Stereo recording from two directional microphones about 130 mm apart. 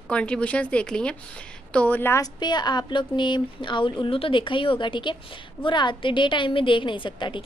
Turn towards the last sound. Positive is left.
turn(degrees=40)  # may be behind; listen again after turning